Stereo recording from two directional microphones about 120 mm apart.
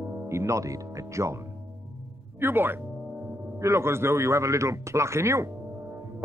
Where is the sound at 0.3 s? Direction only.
25° right (ahead or behind).